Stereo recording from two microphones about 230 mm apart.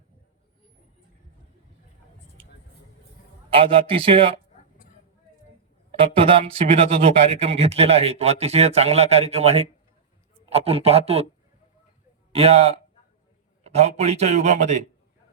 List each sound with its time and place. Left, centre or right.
3.5 s speech: right
6.1 s speech: right
12.3 s speech: right